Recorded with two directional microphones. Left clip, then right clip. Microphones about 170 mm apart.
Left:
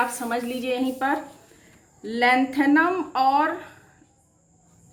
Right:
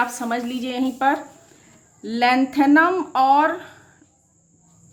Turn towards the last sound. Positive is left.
turn(degrees=-35)  # may be behind; listen again after turning